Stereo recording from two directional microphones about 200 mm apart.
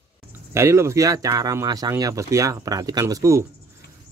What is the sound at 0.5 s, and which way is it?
Speech, 15° right (ahead or behind).